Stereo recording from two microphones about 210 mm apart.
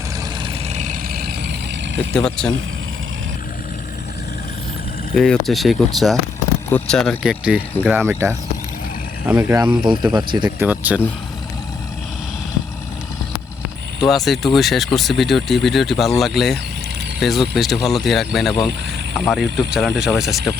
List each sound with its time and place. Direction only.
0.4 s vehicle: 35° right (ahead or behind)
2.1 s speech: centre (ahead or behind)
5.1 s speech: centre (ahead or behind); by 10.7 s 20° right (ahead or behind)
10.7 s speech: 5° right (ahead or behind)
14.1 s speech: centre (ahead or behind)